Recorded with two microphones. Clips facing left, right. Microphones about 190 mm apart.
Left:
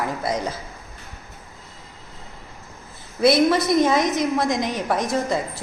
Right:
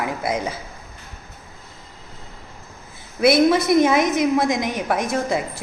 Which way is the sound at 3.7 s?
60° right (ahead or behind).